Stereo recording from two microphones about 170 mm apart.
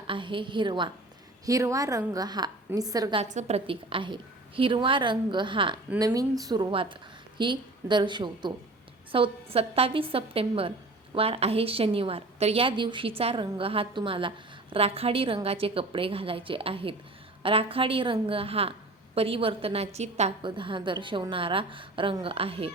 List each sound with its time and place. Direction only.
0.1 s a woman's voice: 30° right (ahead or behind)
3.2 s a woman's voice: 40° right (ahead or behind)
20.4 s a woman's voice: 30° right (ahead or behind)